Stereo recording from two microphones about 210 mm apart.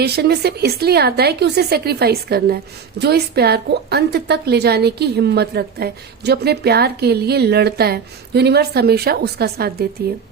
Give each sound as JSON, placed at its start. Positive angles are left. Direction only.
{"t": 0.0, "sound": "a woman's voice", "side_deg": -50}